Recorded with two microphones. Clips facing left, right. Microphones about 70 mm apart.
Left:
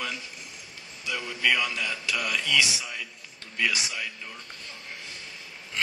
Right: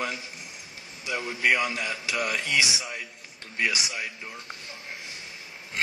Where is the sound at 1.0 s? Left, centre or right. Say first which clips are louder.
Right 2 dB; right.